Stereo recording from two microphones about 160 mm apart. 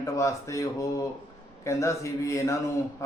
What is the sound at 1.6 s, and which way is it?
Speech, 20° left (ahead or behind).